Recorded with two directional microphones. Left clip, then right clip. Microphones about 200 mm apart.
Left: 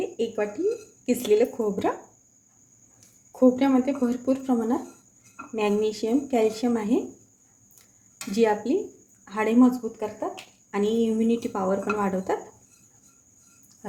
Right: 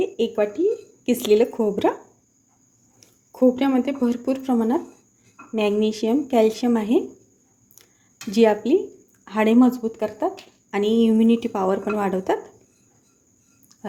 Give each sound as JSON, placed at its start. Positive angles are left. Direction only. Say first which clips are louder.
{"t": 0.0, "sound": "speech", "louder": "right 6 dB", "side_deg": -35}
{"t": 3.3, "sound": "speech", "louder": "right 2 dB", "side_deg": -35}
{"t": 8.3, "sound": "a woman's voice", "louder": "right 5 dB", "side_deg": -40}